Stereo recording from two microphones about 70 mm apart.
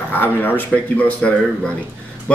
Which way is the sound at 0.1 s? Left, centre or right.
Left.